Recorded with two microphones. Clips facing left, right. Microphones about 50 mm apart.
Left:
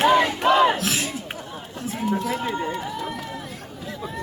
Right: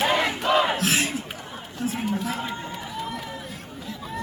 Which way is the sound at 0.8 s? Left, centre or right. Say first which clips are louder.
Right 2 dB; right.